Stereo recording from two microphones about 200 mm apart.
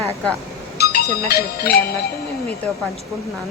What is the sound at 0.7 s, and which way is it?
Speech, 55° left (ahead or behind).